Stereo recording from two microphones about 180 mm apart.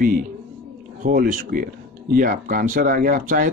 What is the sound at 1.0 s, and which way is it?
Speech, 50° right (ahead or behind).